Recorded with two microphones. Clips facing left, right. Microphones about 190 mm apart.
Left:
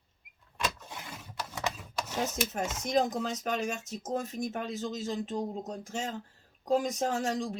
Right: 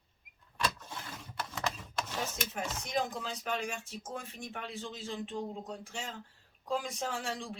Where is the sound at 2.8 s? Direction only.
40° left (ahead or behind).